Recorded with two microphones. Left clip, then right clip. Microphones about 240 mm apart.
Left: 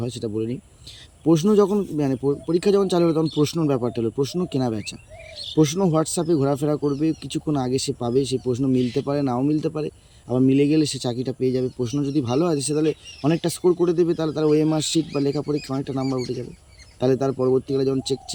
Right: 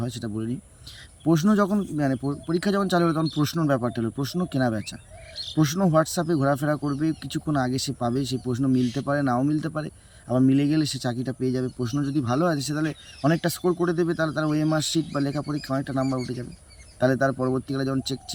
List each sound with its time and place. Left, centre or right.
0.0 s speech: centre
17.3 s speech: centre
17.7 s speech: centre